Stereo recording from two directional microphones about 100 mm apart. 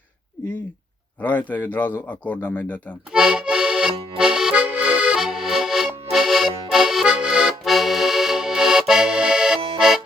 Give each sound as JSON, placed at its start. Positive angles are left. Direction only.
{"t": 1.2, "sound": "a man's voice", "side_deg": 20}
{"t": 3.1, "sound": "accordion", "side_deg": -5}
{"t": 9.7, "sound": "music", "side_deg": -5}